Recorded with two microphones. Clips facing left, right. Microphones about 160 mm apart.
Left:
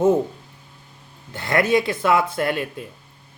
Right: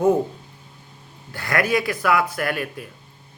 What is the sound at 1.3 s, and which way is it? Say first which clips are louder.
Speech: left 3 dB; 25° left (ahead or behind).